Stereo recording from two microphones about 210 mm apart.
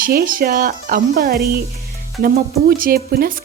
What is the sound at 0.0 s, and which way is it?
Speech, 45° right (ahead or behind).